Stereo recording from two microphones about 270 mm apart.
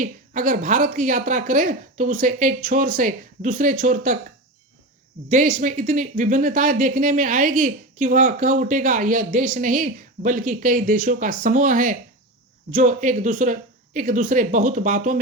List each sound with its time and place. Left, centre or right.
0.0 s speech: right
5.3 s speech: right